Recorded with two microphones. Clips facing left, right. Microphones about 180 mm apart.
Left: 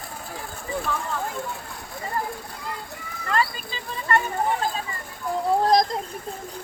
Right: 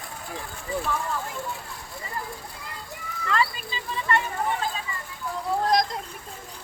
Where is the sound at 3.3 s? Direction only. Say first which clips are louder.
Left 1 dB; 45° left (ahead or behind).